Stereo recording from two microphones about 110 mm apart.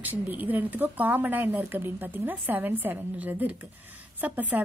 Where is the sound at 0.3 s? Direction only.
15° right (ahead or behind).